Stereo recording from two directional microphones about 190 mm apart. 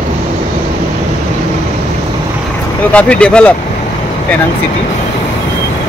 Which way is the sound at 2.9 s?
5° left (ahead or behind).